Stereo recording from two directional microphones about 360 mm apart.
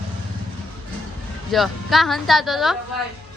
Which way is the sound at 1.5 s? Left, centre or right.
Centre.